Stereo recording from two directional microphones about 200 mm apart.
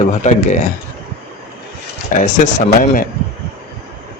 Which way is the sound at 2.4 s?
40° left (ahead or behind).